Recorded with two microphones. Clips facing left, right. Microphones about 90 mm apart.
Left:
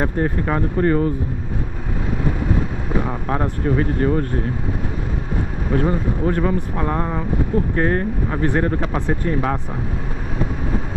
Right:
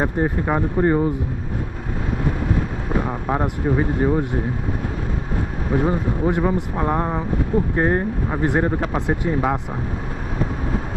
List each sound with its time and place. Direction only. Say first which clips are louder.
0.0 s speech: even; 15° right (ahead or behind)
3.0 s speech: even; 10° right (ahead or behind)
5.7 s speech: even; 15° right (ahead or behind)